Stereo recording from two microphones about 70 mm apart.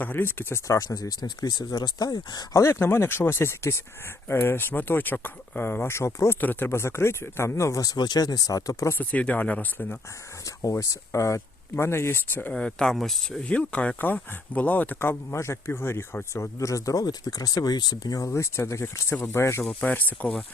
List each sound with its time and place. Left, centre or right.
0.0 s speech: left
0.7 s speech: left
2.6 s speech: left
6.4 s speech: left
7.8 s speech: left
9.0 s speech: left
10.4 s speech: left
12.5 s speech: centre
13.4 s speech: centre
15.4 s speech: left
18.3 s speech: left
19.1 s speech: left
19.8 s speech: left